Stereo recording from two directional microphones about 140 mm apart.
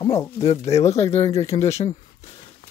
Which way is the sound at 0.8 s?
50° left (ahead or behind).